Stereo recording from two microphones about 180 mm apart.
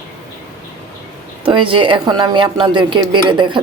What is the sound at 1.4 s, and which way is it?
A woman's voice, 30° right (ahead or behind).